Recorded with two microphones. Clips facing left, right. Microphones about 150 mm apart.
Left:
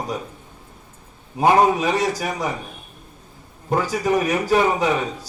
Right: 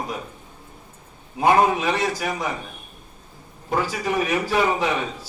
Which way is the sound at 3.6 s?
45° left (ahead or behind).